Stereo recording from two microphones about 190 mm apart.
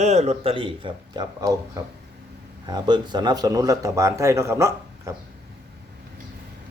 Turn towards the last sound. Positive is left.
turn(degrees=-15)  # may be behind; listen again after turning